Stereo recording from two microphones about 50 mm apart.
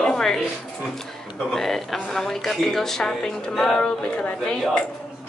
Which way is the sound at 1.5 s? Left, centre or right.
Centre.